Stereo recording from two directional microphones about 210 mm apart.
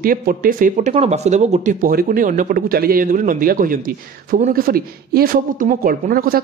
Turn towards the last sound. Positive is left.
turn(degrees=-45)  # may be behind; listen again after turning